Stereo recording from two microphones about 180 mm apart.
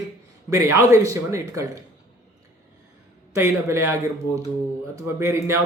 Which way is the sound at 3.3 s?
15° right (ahead or behind).